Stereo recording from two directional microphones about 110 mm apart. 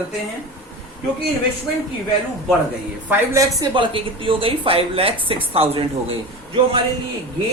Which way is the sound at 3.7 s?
50° right (ahead or behind).